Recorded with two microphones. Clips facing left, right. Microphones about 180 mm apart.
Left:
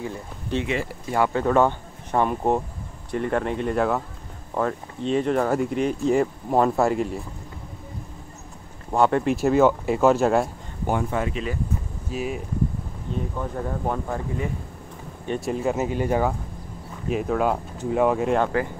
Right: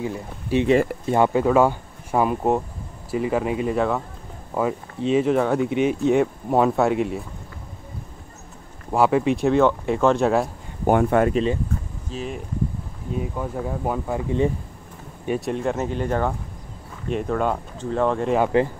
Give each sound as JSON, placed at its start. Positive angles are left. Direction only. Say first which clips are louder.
{"t": 0.0, "sound": "speech", "louder": "right 3 dB", "side_deg": -15}
{"t": 1.4, "sound": "speech", "louder": "right 2 dB", "side_deg": -10}
{"t": 8.9, "sound": "speech", "louder": "right 1 dB", "side_deg": -5}
{"t": 10.9, "sound": "speech", "louder": "right 7 dB", "side_deg": -60}
{"t": 12.1, "sound": "speech", "louder": "left 2 dB", "side_deg": 10}
{"t": 13.1, "sound": "speech", "louder": "right 2 dB", "side_deg": -10}
{"t": 15.2, "sound": "speech", "louder": "right 1 dB", "side_deg": -5}